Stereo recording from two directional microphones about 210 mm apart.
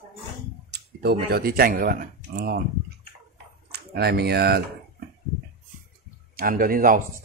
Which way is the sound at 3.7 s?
50° right (ahead or behind).